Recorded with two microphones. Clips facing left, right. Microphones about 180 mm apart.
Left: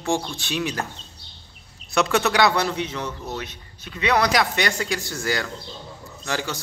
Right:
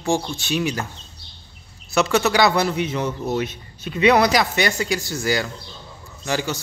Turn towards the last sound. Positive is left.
turn(degrees=-5)  # may be behind; listen again after turning